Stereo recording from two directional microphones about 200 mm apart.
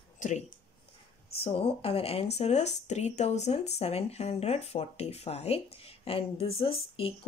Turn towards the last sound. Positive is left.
turn(degrees=30)  # may be behind; listen again after turning